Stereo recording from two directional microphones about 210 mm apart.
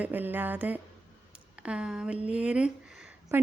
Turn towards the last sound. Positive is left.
turn(degrees=-10)  # may be behind; listen again after turning